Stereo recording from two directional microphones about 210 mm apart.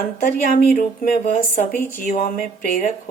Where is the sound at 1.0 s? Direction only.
45° left (ahead or behind).